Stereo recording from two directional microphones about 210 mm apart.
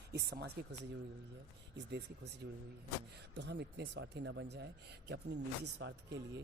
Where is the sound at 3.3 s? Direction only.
55° right (ahead or behind).